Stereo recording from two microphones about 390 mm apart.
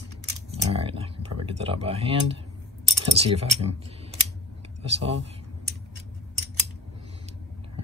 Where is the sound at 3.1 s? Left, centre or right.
Centre.